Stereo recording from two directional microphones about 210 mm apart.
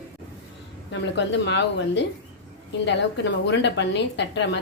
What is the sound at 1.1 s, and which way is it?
Speech, 55° left (ahead or behind).